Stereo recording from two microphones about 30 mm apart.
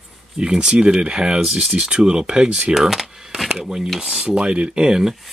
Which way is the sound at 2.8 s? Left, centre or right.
Centre.